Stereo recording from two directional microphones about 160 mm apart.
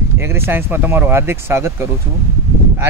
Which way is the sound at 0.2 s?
15° right (ahead or behind).